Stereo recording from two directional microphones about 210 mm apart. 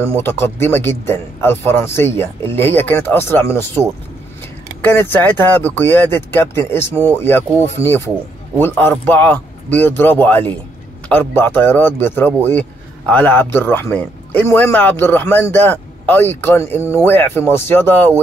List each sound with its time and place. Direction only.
0.2 s speech: 10° left (ahead or behind)
4.8 s speech: 10° left (ahead or behind)